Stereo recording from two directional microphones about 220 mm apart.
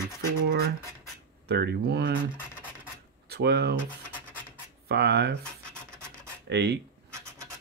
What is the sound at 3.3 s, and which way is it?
Speech, 45° right (ahead or behind).